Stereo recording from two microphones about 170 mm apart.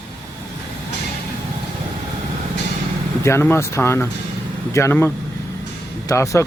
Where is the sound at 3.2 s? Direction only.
15° left (ahead or behind).